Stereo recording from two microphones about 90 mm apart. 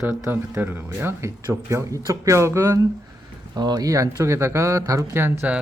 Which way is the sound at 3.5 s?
50° right (ahead or behind).